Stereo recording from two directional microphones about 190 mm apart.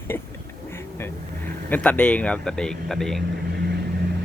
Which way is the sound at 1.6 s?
10° left (ahead or behind).